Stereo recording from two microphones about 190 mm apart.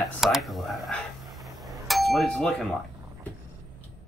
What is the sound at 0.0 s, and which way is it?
Speech, centre (ahead or behind).